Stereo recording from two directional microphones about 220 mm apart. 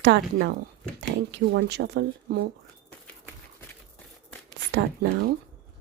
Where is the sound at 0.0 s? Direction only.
50° right (ahead or behind).